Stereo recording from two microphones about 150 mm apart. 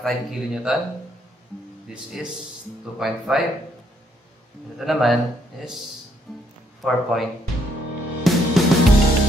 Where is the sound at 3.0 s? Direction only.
Centre (ahead or behind).